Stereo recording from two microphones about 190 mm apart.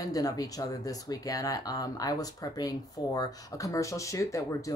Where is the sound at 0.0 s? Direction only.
20° left (ahead or behind).